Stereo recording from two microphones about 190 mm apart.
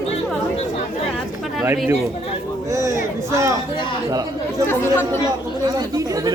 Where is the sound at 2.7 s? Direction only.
15° right (ahead or behind).